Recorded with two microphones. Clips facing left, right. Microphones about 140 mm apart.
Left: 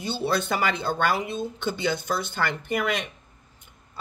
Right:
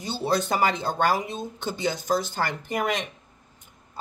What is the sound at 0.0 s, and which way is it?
Speech, 40° right (ahead or behind).